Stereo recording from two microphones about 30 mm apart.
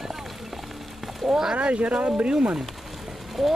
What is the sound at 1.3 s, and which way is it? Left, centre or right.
Speech, centre.